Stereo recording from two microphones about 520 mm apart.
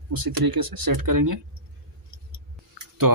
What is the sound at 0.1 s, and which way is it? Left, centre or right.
Speech, right.